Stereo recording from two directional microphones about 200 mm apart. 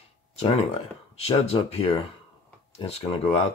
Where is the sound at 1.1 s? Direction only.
30° left (ahead or behind).